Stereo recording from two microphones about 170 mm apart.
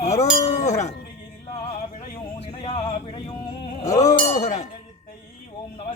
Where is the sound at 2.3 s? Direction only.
35° left (ahead or behind).